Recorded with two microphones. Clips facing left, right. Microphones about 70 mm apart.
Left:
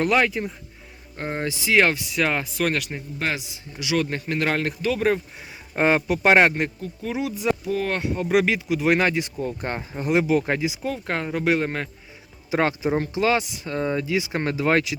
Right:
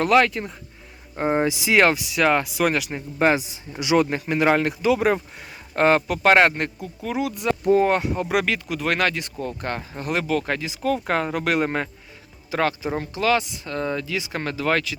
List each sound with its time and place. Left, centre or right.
0.0 s speech: centre
1.1 s a man's voice: centre
1.8 s a man's voice: centre
3.2 s a man's voice: right
4.0 s a man's voice: centre
5.7 s speech: centre
6.7 s speech: centre
9.0 s speech: centre
10.8 s speech: centre
12.5 s speech: left
12.9 s speech: centre